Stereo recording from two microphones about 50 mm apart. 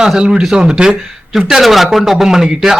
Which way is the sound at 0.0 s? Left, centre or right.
Centre.